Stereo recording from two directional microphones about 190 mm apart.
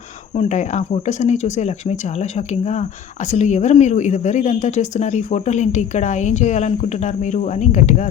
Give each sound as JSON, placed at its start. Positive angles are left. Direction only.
{"t": 0.3, "sound": "a woman's voice", "side_deg": 40}